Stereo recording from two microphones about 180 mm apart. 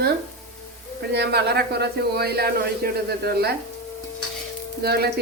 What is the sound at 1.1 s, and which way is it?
Speech, 65° right (ahead or behind).